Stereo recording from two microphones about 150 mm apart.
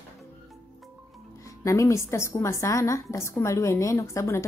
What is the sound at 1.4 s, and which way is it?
A woman's voice, 20° left (ahead or behind).